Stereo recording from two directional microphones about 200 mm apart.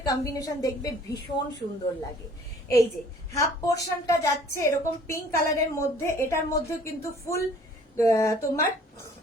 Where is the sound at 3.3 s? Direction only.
15° left (ahead or behind).